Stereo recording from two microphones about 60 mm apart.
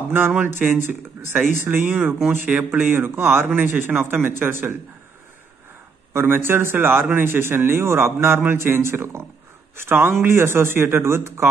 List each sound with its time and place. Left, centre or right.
0.6 s a man's voice: right
2.2 s speech: right
2.9 s a man's voice: right
6.1 s a man's voice: right